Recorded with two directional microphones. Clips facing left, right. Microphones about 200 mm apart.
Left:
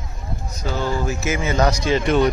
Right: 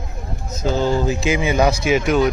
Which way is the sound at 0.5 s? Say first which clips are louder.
Right 5 dB; 25° right (ahead or behind).